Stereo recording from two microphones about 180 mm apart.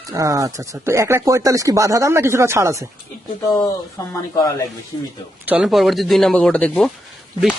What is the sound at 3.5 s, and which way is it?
Speech, 20° left (ahead or behind).